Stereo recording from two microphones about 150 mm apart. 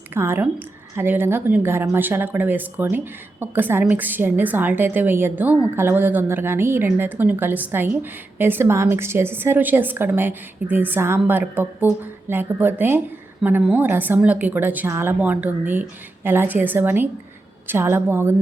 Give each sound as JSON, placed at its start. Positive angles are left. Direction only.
{"t": 0.1, "sound": "a woman's voice", "side_deg": -15}